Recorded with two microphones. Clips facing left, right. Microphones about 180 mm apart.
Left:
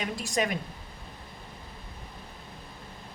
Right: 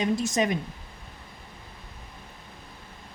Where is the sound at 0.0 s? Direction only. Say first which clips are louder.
Right 5 dB; 20° right (ahead or behind).